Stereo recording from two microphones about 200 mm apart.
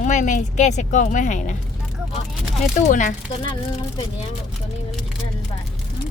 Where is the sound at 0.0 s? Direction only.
40° left (ahead or behind).